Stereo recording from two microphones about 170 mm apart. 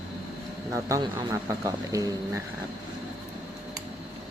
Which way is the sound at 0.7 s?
20° right (ahead or behind).